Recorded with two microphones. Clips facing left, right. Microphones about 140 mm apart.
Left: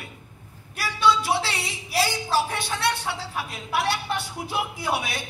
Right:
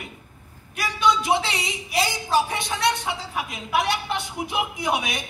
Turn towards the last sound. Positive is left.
turn(degrees=-20)  # may be behind; listen again after turning